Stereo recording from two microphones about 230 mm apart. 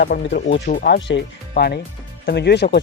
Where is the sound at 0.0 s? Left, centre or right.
Left.